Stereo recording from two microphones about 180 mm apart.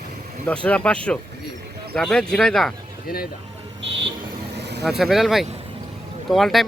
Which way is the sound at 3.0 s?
55° left (ahead or behind).